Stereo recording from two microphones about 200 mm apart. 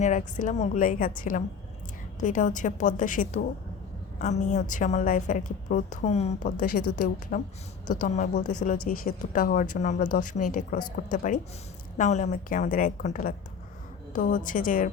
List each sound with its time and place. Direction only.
0.0 s speech: 40° left (ahead or behind)